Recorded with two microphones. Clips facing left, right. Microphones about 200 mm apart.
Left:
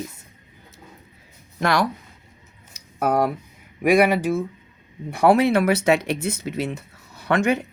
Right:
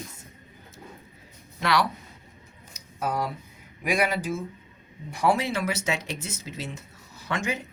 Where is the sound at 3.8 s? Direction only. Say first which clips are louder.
Left 9 dB; 60° left (ahead or behind).